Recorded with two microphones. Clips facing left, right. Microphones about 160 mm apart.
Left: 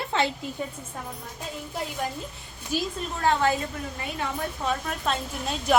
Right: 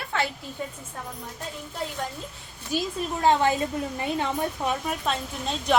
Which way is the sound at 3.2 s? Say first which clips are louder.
Right 2 dB; 20° right (ahead or behind).